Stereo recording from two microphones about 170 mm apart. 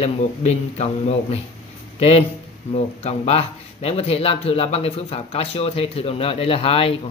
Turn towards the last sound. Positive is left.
turn(degrees=35)  # may be behind; listen again after turning